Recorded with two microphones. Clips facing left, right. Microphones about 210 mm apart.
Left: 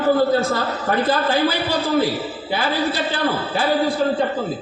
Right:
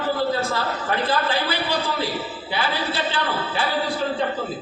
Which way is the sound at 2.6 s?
45° left (ahead or behind).